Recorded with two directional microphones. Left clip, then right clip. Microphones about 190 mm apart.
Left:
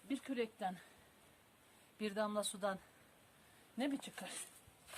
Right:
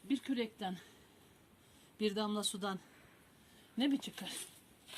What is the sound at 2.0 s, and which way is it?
Speech, 20° left (ahead or behind).